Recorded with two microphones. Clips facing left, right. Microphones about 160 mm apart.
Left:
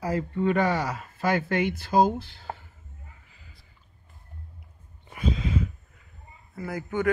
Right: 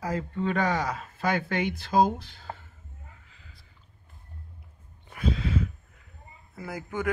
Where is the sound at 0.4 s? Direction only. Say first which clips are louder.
Left 3 dB; 10° left (ahead or behind).